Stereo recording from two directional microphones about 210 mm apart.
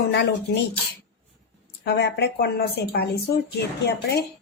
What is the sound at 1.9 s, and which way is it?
Speech, 55° left (ahead or behind).